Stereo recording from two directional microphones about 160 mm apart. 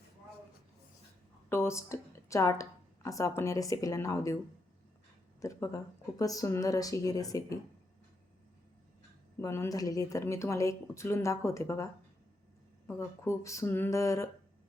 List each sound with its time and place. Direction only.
1.5 s speech: 15° left (ahead or behind)
5.4 s speech: 20° left (ahead or behind)
9.4 s speech: 20° left (ahead or behind)
12.9 s speech: 15° left (ahead or behind)